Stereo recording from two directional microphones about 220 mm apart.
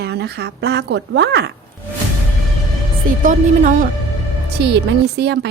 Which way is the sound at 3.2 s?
35° right (ahead or behind).